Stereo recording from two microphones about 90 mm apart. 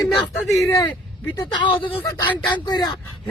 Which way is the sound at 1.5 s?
60° left (ahead or behind).